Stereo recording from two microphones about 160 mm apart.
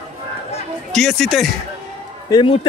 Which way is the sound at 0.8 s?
Centre (ahead or behind).